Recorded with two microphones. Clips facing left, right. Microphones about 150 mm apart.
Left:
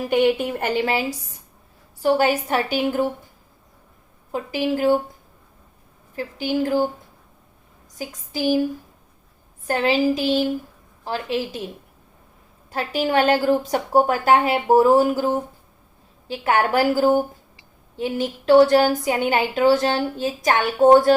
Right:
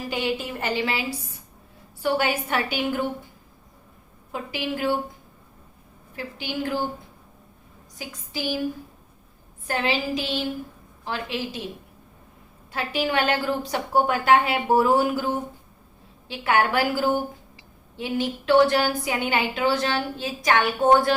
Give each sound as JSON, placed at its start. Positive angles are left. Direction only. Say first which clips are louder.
{"t": 0.1, "sound": "a woman's voice", "louder": "left 9 dB", "side_deg": 60}
{"t": 4.3, "sound": "a woman's voice", "louder": "left 6 dB", "side_deg": 40}
{"t": 6.1, "sound": "a woman's voice", "louder": "left 7 dB", "side_deg": 40}
{"t": 7.9, "sound": "a woman's voice", "louder": "left 5 dB", "side_deg": 45}
{"t": 9.6, "sound": "a woman's voice", "louder": "left 6 dB", "side_deg": 45}
{"t": 12.7, "sound": "a woman's voice", "louder": "left 4 dB", "side_deg": 40}